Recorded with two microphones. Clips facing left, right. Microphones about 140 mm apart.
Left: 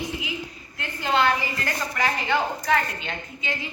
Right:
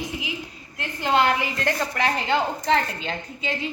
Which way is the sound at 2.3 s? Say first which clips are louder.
Right 1 dB; 25° right (ahead or behind).